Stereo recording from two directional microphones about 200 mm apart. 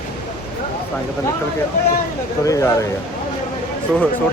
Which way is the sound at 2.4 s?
15° left (ahead or behind).